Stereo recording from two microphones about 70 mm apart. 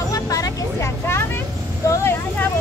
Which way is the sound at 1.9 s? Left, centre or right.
Left.